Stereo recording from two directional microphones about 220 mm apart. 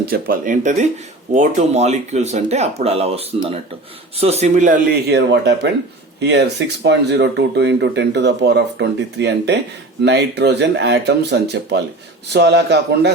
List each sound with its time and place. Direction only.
0.1 s speech: 40° right (ahead or behind)